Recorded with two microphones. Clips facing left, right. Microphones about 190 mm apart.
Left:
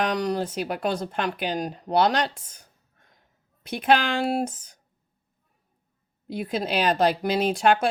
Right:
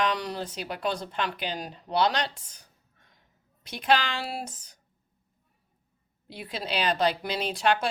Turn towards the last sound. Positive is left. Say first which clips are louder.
# left 5 dB
turn(degrees=50)  # may be behind; listen again after turning